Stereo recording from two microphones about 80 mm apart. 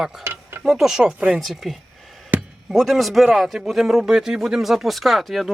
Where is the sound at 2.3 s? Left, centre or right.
Centre.